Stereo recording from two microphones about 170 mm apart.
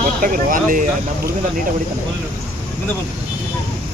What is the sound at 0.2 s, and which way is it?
Speech, 55° right (ahead or behind).